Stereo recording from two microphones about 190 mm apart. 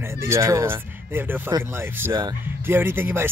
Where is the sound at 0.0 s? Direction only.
15° right (ahead or behind).